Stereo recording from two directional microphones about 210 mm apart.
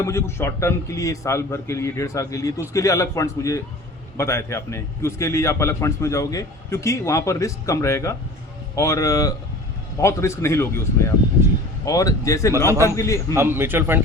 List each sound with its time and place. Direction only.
0.0 s a man's voice: 15° left (ahead or behind)
11.9 s a man's voice: 15° left (ahead or behind)
13.3 s a man's voice: 10° right (ahead or behind)